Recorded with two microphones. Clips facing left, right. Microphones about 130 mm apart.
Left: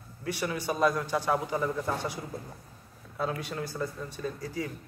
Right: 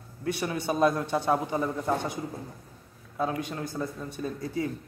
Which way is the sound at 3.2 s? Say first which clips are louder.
Right 2 dB; 20° right (ahead or behind).